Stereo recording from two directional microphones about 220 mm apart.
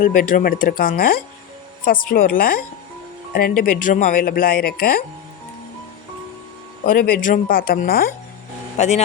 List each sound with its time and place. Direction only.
0.0 s speech: 40° left (ahead or behind)
6.8 s speech: 40° left (ahead or behind)
8.8 s speech: 30° left (ahead or behind)